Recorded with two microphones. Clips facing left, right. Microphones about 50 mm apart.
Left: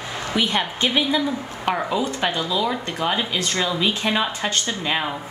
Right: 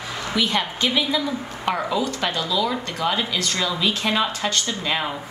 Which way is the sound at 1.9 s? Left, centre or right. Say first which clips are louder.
Left 1 dB; left.